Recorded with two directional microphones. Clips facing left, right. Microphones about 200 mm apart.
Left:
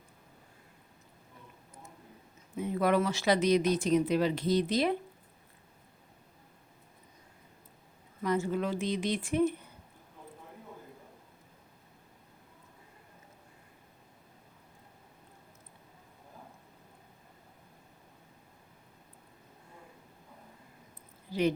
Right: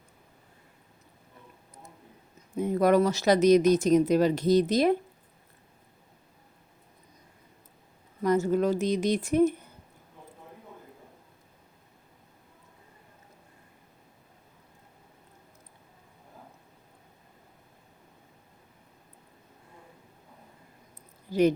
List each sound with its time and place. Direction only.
2.6 s speech: 40° right (ahead or behind)
8.2 s speech: 40° right (ahead or behind)
21.3 s a sound: 45° right (ahead or behind)